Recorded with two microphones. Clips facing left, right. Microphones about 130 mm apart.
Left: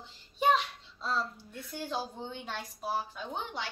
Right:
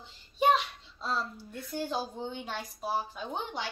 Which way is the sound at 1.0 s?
10° right (ahead or behind).